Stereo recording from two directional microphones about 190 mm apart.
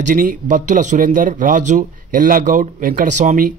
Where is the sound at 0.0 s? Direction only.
45° right (ahead or behind).